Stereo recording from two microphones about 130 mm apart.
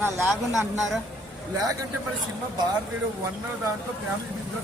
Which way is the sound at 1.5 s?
30° right (ahead or behind).